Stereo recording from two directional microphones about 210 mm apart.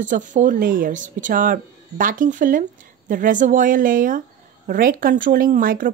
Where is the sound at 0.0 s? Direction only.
40° right (ahead or behind).